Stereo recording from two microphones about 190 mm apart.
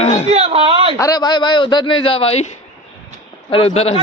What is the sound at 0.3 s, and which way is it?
Speech, 35° right (ahead or behind).